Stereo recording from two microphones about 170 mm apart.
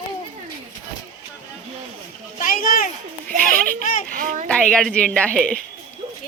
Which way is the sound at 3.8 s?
50° left (ahead or behind).